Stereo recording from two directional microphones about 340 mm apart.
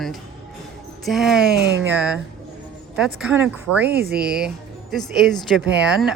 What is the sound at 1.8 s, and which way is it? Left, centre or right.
Speech, centre.